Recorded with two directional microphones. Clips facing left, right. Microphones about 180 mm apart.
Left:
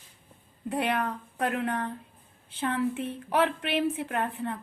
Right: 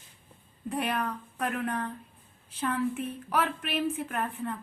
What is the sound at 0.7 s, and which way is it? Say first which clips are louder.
A woman's voice: left 2 dB; 30° left (ahead or behind).